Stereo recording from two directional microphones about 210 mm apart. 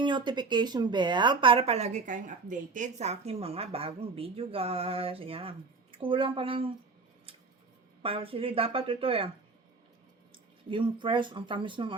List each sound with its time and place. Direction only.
0.0 s speech: 20° right (ahead or behind)
8.0 s speech: 25° right (ahead or behind)
10.7 s speech: 25° right (ahead or behind)